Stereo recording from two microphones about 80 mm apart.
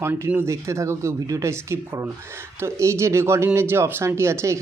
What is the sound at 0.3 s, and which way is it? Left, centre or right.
Speech, right.